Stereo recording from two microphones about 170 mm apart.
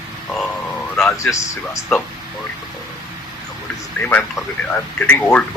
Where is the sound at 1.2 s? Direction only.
15° left (ahead or behind).